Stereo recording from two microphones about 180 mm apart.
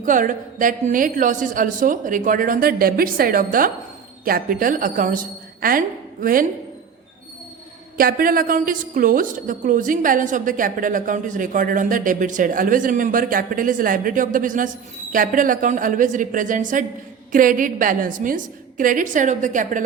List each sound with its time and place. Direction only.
0.0 s a woman's voice: 45° right (ahead or behind)
7.9 s a woman's voice: 55° right (ahead or behind)